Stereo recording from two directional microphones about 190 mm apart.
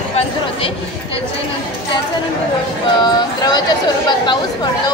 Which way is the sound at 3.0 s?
20° left (ahead or behind).